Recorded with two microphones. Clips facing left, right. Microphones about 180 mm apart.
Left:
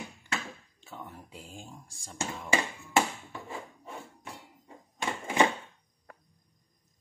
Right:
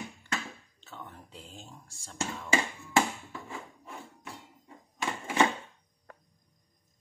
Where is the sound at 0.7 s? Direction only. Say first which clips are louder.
Left 2 dB; 10° left (ahead or behind).